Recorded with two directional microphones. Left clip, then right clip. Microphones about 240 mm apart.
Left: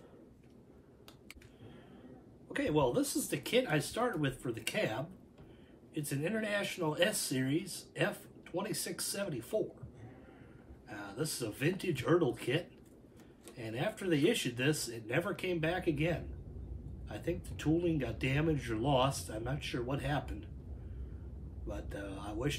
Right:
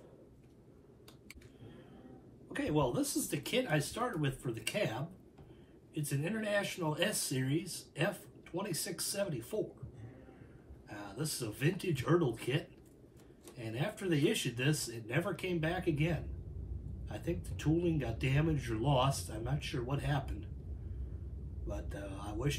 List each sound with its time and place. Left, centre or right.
2.5 s speech: centre
10.9 s speech: centre
21.6 s speech: centre